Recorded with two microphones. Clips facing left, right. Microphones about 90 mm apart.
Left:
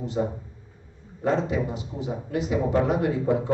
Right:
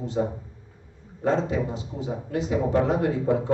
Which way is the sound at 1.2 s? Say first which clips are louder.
Even; 30° right (ahead or behind).